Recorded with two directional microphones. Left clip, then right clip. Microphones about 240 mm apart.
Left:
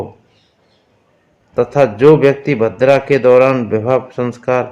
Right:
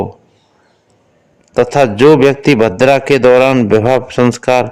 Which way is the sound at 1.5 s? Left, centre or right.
Right.